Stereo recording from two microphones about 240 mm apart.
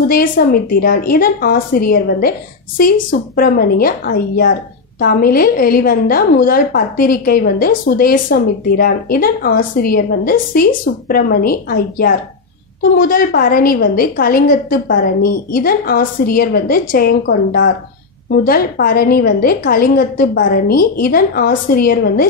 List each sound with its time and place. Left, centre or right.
0.1 s a woman's voice: left